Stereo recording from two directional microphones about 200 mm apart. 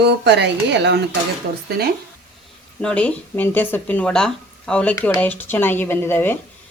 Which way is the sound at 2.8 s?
5° left (ahead or behind).